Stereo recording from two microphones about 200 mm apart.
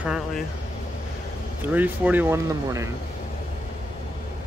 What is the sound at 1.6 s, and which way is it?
Speech, 10° right (ahead or behind).